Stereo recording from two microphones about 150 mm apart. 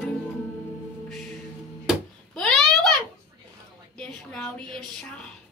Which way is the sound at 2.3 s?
5° left (ahead or behind).